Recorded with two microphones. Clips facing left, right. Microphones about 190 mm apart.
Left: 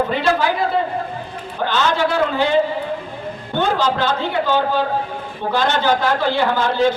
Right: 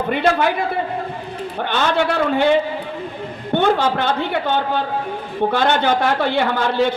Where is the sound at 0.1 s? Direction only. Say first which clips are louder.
Right 1 dB; 60° right (ahead or behind).